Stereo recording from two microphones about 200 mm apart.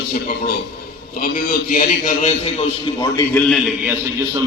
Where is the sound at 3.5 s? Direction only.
Centre (ahead or behind).